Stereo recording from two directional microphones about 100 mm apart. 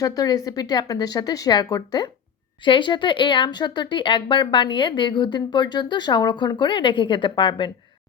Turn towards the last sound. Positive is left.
turn(degrees=50)  # may be behind; listen again after turning